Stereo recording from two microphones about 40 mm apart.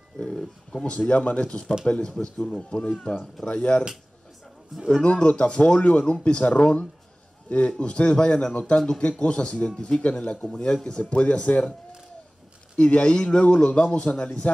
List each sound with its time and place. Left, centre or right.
0.2 s speech: centre
0.8 s a man's voice: left
5.0 s a man's voice: left
12.7 s a man's voice: left